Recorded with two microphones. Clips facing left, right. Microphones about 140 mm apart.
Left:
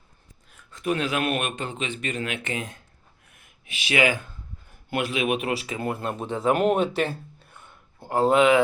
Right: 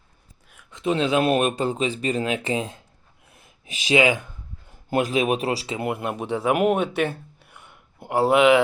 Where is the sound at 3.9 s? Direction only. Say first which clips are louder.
Right 4 dB; 20° right (ahead or behind).